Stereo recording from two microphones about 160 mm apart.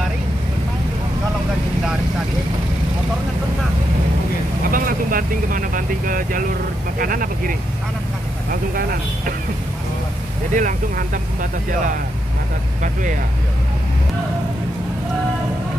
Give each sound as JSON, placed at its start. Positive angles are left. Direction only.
{"t": 4.6, "sound": "vehicle", "side_deg": -60}
{"t": 7.0, "sound": "speech", "side_deg": -60}
{"t": 10.5, "sound": "speech", "side_deg": -55}
{"t": 12.8, "sound": "speech", "side_deg": -55}